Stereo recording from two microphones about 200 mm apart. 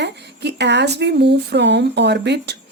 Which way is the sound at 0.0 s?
60° right (ahead or behind).